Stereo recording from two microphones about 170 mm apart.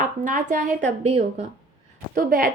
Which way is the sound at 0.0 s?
50° right (ahead or behind).